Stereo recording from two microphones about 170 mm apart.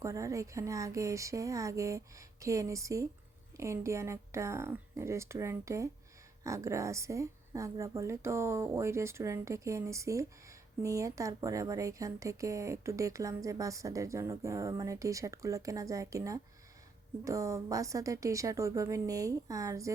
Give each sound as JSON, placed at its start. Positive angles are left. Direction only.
{"t": 0.0, "sound": "speech", "side_deg": -20}